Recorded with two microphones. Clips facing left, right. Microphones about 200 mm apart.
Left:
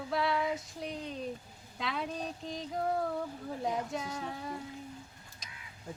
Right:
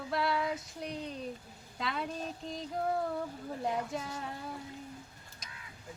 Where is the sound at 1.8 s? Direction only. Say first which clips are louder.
Even; centre (ahead or behind).